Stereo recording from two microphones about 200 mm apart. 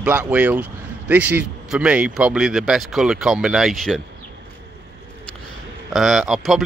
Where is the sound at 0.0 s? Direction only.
5° right (ahead or behind).